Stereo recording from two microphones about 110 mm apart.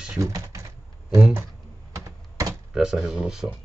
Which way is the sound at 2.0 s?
30° right (ahead or behind).